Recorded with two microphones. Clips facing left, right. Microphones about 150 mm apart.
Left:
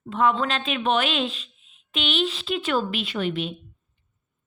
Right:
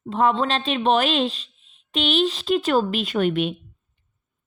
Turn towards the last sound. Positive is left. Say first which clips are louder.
# right 6 dB
turn(degrees=-55)  # may be behind; listen again after turning